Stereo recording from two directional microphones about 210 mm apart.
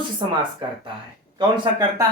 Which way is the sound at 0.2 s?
25° right (ahead or behind).